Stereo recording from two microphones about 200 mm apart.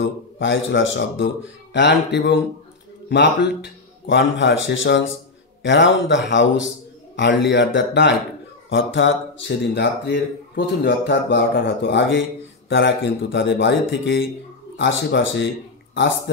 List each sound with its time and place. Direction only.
0.0 s speech: 65° left (ahead or behind)